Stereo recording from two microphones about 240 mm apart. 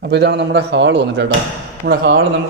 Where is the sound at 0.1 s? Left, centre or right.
Right.